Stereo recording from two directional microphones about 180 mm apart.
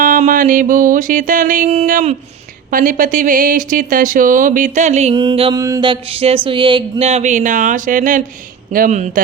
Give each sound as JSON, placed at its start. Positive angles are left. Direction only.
{"t": 0.0, "sound": "music", "side_deg": -50}
{"t": 1.9, "sound": "speech", "side_deg": -45}